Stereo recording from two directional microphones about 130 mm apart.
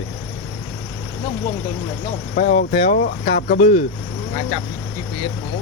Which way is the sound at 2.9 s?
65° left (ahead or behind).